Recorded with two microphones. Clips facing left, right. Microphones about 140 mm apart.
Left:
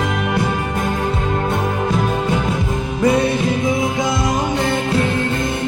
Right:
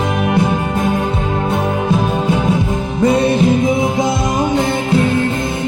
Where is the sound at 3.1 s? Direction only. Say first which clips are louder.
Right 4 dB; 25° right (ahead or behind).